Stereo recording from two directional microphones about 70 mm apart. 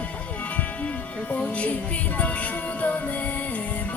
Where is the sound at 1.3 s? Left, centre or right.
Centre.